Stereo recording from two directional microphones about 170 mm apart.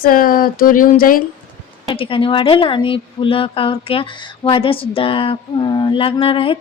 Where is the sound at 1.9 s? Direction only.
30° left (ahead or behind).